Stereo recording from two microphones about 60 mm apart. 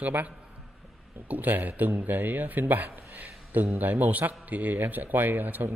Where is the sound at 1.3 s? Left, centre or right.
Right.